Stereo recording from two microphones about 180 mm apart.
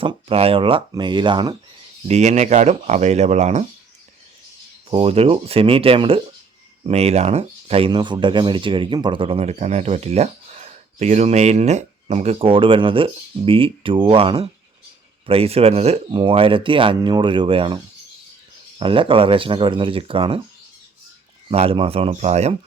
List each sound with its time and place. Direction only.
0.0 s speech: 30° right (ahead or behind)
2.0 s speech: 40° right (ahead or behind)
4.9 s speech: 30° right (ahead or behind)
18.8 s speech: 30° right (ahead or behind)
21.5 s speech: 35° right (ahead or behind)